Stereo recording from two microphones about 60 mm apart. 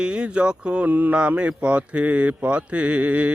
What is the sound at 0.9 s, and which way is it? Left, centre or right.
Speech, right.